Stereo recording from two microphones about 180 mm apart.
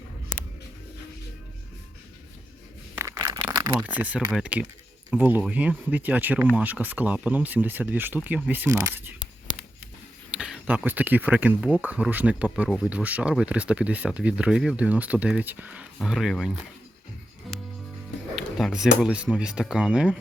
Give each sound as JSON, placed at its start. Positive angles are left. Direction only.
{"t": 2.9, "sound": "a sound", "side_deg": -15}
{"t": 3.8, "sound": "speech", "side_deg": -10}
{"t": 10.3, "sound": "speech", "side_deg": -5}
{"t": 18.3, "sound": "speech", "side_deg": 0}